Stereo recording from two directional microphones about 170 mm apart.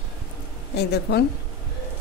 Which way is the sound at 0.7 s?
75° left (ahead or behind).